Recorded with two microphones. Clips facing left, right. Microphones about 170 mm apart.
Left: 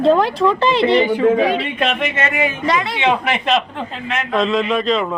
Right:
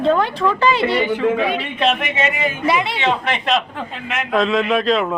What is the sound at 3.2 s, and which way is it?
A man's voice, 5° left (ahead or behind).